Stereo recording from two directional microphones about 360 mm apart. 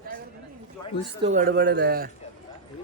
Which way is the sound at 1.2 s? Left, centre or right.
Right.